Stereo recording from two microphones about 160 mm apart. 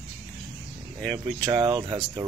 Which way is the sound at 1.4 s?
30° right (ahead or behind).